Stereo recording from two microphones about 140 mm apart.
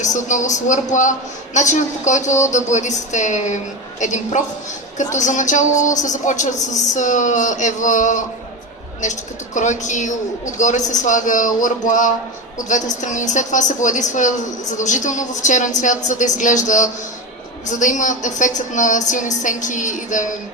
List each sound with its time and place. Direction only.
0.0 s a woman's voice: 65° left (ahead or behind)
9.6 s a woman's voice: 60° left (ahead or behind)